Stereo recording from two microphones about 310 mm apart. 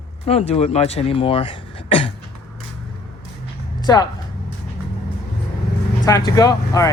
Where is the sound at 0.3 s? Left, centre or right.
Centre.